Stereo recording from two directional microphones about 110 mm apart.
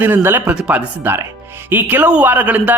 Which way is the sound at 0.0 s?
20° right (ahead or behind).